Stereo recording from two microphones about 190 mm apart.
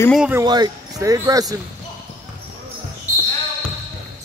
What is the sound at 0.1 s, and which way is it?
Speech, 5° right (ahead or behind).